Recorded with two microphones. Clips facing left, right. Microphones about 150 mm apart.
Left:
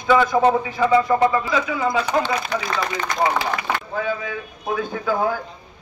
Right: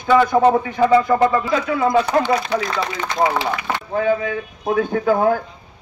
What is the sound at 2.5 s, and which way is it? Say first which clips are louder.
Speech: right 3 dB; 30° right (ahead or behind).